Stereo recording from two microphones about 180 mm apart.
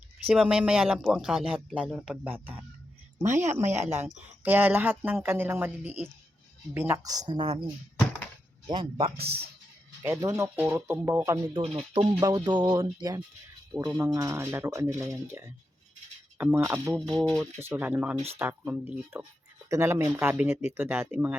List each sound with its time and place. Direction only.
0.3 s speech: 5° right (ahead or behind)
6.7 s music: 15° right (ahead or behind)
8.6 s speech: 25° right (ahead or behind)
9.1 s speech: 60° right (ahead or behind)
10.0 s speech: 15° right (ahead or behind); by 12.1 s 30° right (ahead or behind)
12.2 s music: 25° right (ahead or behind)
13.8 s speech: 20° right (ahead or behind)
17.2 s speech: centre (ahead or behind)